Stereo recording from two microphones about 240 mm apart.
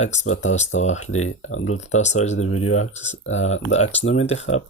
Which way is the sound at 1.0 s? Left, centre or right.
Left.